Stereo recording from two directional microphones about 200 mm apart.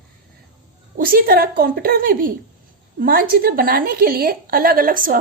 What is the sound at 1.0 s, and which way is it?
A woman's voice, 45° right (ahead or behind).